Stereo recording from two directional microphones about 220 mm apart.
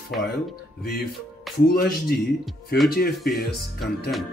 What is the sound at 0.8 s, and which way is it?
Speech, 45° left (ahead or behind).